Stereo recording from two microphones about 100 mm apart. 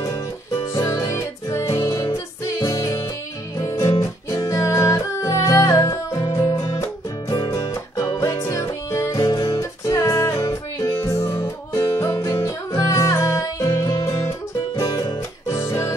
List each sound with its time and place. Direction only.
0.7 s music: 35° left (ahead or behind)
9.1 s music: 40° left (ahead or behind)